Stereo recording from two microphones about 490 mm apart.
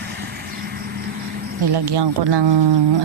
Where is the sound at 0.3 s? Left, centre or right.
Centre.